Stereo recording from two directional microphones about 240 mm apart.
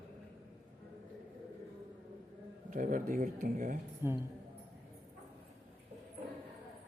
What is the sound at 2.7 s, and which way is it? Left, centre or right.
Speech, right.